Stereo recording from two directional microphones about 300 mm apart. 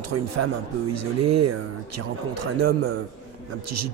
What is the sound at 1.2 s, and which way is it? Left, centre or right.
A man's voice, right.